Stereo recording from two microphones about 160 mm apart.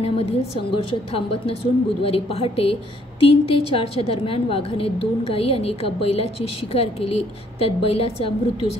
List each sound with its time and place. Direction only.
0.0 s a woman's voice: 35° left (ahead or behind)